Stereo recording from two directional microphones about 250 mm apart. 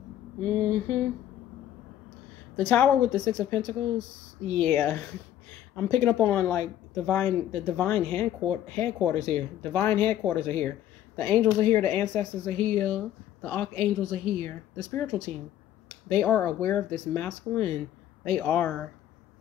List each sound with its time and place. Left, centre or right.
0.6 s speech: centre
2.5 s a woman's voice: centre
16.1 s a woman's voice: centre